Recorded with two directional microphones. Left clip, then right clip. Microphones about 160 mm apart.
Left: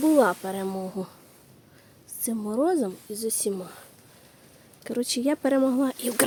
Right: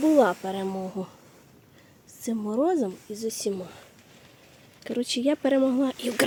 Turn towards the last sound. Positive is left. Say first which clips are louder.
# even
turn(degrees=0)  # may be behind; listen again after turning